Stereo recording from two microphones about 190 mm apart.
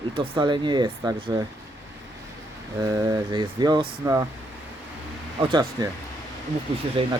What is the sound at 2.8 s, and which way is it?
Speech, 20° right (ahead or behind).